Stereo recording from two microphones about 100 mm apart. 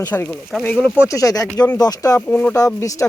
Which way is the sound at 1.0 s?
35° left (ahead or behind).